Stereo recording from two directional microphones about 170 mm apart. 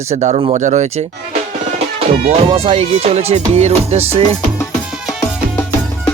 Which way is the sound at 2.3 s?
35° right (ahead or behind).